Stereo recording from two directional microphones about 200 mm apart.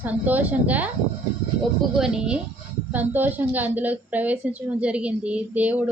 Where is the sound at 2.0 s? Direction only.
5° right (ahead or behind).